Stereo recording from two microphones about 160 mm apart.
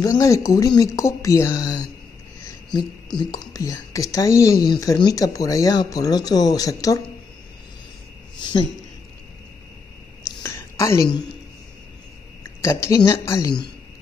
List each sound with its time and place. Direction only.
0.0 s speech: 20° left (ahead or behind)
3.2 s speech: 20° left (ahead or behind)
8.4 s speech: 30° left (ahead or behind)
10.2 s a sound: 20° left (ahead or behind)
12.4 s a woman's voice: 20° left (ahead or behind)